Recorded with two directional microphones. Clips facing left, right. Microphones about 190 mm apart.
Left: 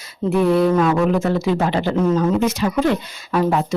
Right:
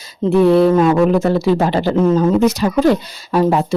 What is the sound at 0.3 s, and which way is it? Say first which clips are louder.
A woman's voice: right 5 dB; 30° right (ahead or behind).